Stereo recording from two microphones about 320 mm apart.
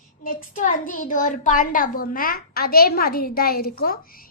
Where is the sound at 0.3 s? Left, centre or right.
Left.